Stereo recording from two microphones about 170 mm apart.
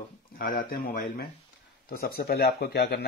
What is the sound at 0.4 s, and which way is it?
Speech, 55° left (ahead or behind).